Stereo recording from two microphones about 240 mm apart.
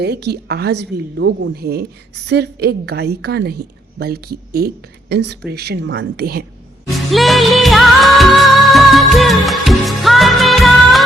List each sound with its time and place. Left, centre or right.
0.0 s a woman's voice: right
7.1 s music of bollywood: centre